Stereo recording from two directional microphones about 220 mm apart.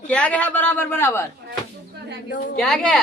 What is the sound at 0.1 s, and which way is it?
A man's voice, 5° left (ahead or behind).